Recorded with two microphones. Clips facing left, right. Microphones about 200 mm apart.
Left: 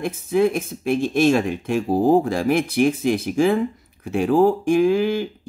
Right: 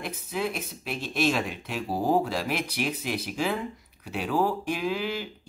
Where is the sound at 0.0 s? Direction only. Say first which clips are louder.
Left 12 dB; 50° left (ahead or behind).